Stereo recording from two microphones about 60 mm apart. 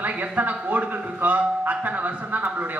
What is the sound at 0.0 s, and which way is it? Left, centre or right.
A man's voice, right.